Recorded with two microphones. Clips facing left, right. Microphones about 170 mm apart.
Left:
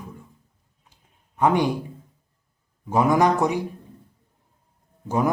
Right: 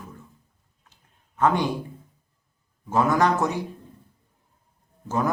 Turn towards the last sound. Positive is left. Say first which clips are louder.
# left 3 dB
turn(degrees=15)  # may be behind; listen again after turning